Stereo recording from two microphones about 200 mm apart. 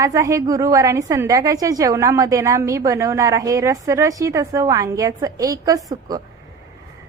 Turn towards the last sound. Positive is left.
turn(degrees=-20)  # may be behind; listen again after turning